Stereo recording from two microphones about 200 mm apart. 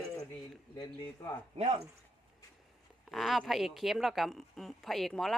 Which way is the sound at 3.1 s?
Centre (ahead or behind).